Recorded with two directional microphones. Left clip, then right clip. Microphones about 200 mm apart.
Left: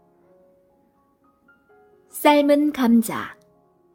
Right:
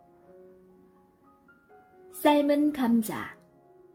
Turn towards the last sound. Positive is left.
turn(degrees=25)  # may be behind; listen again after turning